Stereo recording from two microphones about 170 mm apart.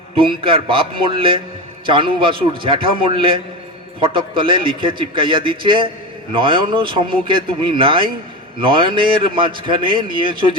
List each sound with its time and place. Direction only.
0.2 s a man's voice: 30° right (ahead or behind)